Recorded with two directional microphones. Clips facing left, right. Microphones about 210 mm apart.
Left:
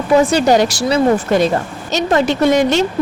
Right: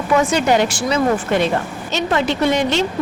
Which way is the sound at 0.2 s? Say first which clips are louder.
Left 3 dB; 35° left (ahead or behind).